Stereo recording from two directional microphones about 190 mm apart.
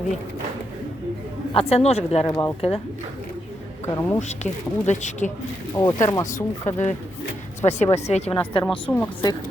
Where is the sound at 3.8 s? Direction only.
20° left (ahead or behind).